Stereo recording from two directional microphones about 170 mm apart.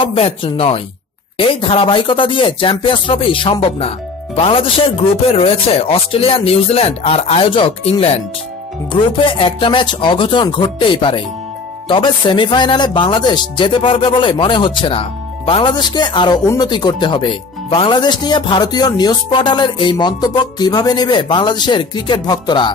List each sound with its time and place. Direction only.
0.0 s speech: 35° left (ahead or behind)